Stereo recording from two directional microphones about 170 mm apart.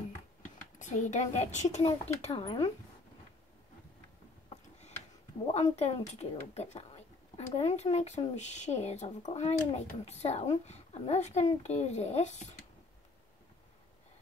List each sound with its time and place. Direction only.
0.7 s speech: 45° left (ahead or behind); by 2.7 s 30° left (ahead or behind)
5.5 s speech: 40° left (ahead or behind)